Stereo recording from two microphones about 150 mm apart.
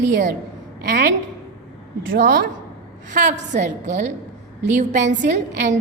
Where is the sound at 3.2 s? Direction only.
55° right (ahead or behind).